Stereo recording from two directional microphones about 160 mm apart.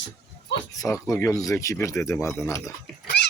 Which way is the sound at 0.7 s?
20° left (ahead or behind).